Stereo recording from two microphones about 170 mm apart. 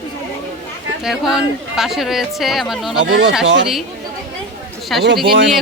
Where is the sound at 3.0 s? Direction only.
90° right.